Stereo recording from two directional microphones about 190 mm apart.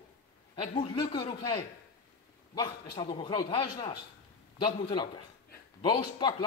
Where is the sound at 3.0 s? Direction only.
25° left (ahead or behind).